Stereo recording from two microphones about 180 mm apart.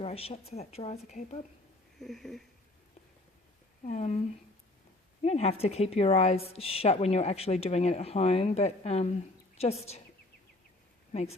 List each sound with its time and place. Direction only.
0.0 s speech: 35° left (ahead or behind)
2.0 s speech: centre (ahead or behind)
3.8 s speech: 40° left (ahead or behind)
5.2 s speech: 35° left (ahead or behind)
11.1 s speech: 35° left (ahead or behind)